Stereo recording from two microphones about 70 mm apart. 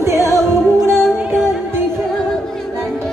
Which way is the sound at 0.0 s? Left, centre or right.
Right.